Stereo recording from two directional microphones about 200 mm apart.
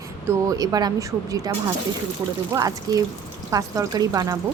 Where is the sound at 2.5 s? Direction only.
15° right (ahead or behind).